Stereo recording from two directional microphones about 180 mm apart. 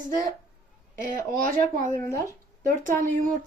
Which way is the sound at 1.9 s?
15° left (ahead or behind).